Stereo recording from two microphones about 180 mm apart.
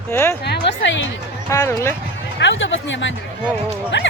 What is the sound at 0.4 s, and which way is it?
Music, 70° left (ahead or behind).